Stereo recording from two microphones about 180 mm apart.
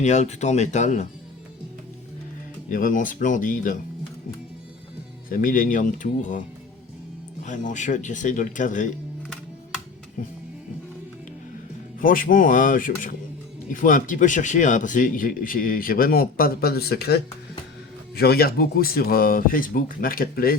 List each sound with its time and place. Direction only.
0.0 s speech: 40° left (ahead or behind)
2.6 s speech: 50° left (ahead or behind)
5.3 s speech: 50° left (ahead or behind)
7.4 s speech: 45° left (ahead or behind)
11.9 s speech: 50° left (ahead or behind)